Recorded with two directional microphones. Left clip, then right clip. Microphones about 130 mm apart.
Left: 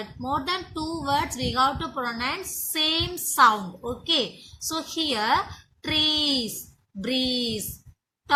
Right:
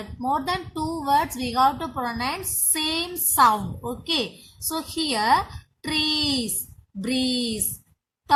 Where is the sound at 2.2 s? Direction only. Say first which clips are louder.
Right 1 dB; 45° right (ahead or behind).